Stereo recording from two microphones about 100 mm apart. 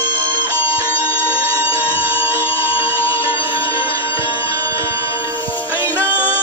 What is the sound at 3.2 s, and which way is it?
Music, 60° left (ahead or behind).